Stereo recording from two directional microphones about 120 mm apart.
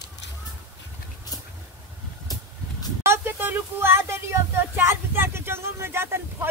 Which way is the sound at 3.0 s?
20° right (ahead or behind).